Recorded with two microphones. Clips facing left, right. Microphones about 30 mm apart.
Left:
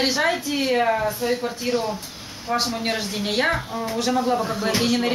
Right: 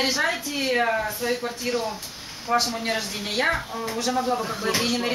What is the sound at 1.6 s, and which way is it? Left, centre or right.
Speech, centre.